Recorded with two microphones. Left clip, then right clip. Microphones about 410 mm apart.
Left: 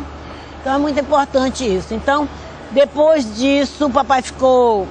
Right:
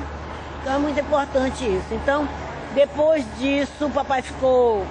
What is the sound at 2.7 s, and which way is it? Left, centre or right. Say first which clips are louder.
Speech: left 6 dB; left.